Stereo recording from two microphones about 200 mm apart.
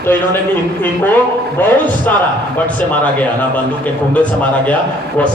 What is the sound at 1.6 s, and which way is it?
Speech, 10° left (ahead or behind).